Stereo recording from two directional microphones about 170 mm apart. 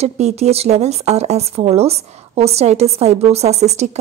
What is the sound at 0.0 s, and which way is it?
Speech, 40° right (ahead or behind).